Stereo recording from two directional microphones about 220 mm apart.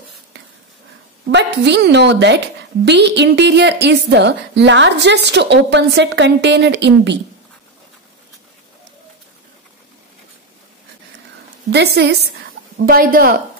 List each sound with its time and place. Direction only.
1.3 s a woman's voice: 50° right (ahead or behind)
11.7 s a woman's voice: 50° right (ahead or behind)